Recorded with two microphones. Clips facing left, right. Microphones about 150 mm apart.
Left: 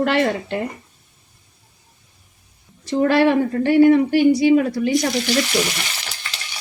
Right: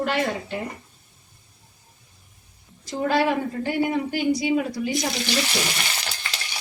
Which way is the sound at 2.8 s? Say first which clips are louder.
Left 6 dB; 65° left (ahead or behind).